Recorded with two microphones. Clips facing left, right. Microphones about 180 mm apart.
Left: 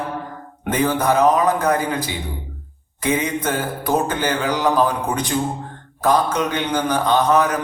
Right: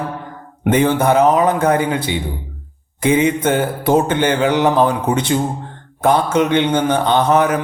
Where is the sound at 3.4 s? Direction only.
25° right (ahead or behind).